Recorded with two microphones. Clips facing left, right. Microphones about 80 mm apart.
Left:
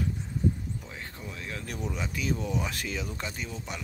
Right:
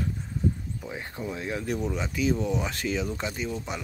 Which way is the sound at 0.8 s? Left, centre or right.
Centre.